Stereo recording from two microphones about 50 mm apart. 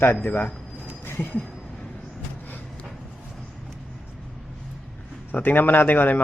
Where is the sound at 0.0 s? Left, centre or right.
Left.